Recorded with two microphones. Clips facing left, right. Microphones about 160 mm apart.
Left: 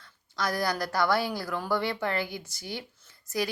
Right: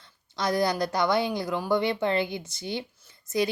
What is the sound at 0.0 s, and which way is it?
A woman's voice, 20° right (ahead or behind).